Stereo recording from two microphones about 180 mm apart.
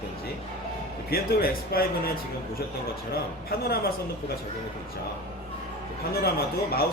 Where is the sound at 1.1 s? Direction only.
55° left (ahead or behind).